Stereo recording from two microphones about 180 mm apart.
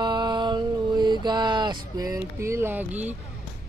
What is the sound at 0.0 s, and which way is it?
Mantra, 25° right (ahead or behind).